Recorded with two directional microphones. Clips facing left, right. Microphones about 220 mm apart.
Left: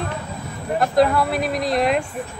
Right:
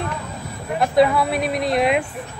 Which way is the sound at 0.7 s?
Centre (ahead or behind).